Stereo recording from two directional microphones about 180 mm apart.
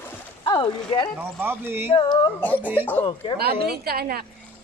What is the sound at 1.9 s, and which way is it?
Speech, 25° left (ahead or behind).